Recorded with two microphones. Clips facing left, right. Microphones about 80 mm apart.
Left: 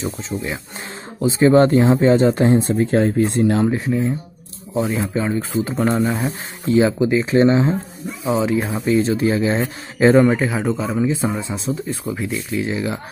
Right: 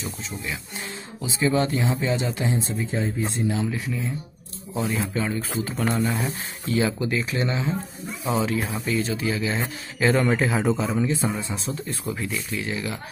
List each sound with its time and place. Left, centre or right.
0.0 s speech: left
3.7 s speech: left
4.7 s speech: left
10.2 s speech: centre
11.0 s a man's voice: centre
11.3 s speech: left